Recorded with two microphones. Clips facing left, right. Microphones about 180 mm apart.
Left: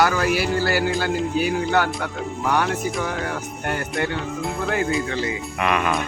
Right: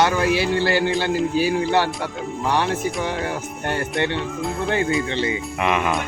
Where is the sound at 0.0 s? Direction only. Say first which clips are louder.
Right 1 dB; 25° right (ahead or behind).